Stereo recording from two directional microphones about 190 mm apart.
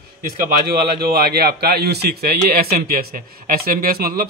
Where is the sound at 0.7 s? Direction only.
55° right (ahead or behind).